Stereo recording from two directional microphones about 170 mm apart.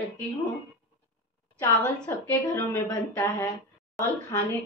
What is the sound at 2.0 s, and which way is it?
Speech, 15° left (ahead or behind).